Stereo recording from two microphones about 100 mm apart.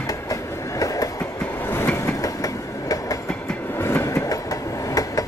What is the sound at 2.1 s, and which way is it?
Train, 35° left (ahead or behind).